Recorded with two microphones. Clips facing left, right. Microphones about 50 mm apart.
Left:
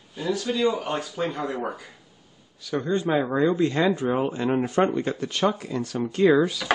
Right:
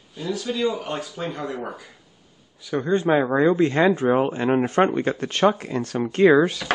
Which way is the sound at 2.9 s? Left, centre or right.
Right.